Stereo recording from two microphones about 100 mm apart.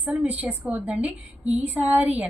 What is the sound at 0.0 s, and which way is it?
A woman's voice, 15° right (ahead or behind).